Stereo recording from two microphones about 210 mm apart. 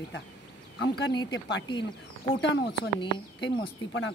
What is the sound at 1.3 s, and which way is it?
Speech, 60° left (ahead or behind).